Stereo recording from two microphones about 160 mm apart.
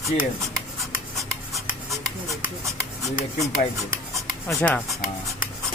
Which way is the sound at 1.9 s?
20° right (ahead or behind).